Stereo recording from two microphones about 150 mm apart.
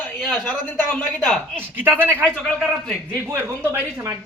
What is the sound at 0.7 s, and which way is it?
Speech, 10° left (ahead or behind).